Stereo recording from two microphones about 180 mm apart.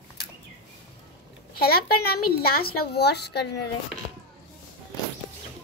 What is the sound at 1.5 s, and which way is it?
A woman's voice, 60° left (ahead or behind).